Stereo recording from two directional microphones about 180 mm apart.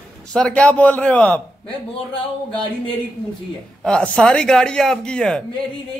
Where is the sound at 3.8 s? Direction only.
5° left (ahead or behind).